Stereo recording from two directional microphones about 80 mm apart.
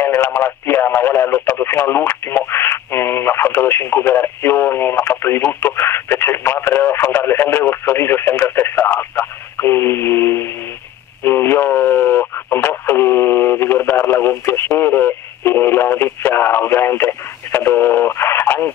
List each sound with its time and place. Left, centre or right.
0.0 s speech: left
11.2 s radio: left